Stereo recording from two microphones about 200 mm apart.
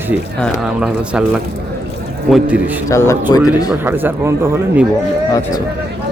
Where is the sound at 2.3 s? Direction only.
5° right (ahead or behind).